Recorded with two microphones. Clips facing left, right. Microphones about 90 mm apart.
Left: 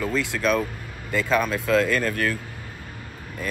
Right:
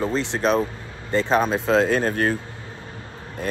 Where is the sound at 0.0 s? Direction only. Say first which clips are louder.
Right 2 dB; 30° right (ahead or behind).